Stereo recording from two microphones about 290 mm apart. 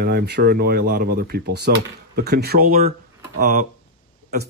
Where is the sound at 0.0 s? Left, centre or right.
Right.